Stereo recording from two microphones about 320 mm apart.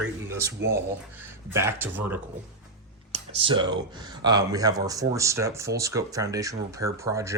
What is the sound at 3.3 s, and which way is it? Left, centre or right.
Speech, centre.